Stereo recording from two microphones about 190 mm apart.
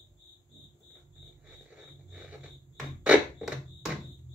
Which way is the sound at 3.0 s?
5° right (ahead or behind).